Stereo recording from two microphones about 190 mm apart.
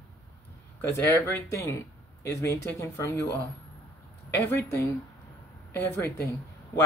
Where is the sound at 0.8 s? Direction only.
10° left (ahead or behind).